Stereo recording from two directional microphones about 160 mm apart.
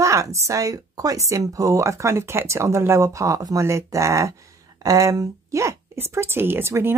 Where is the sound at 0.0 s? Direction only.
20° right (ahead or behind).